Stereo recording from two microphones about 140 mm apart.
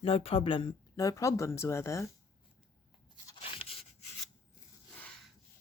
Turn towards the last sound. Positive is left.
turn(degrees=5)  # may be behind; listen again after turning